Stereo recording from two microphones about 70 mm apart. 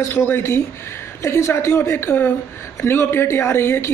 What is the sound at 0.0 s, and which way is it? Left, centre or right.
A woman's voice, left.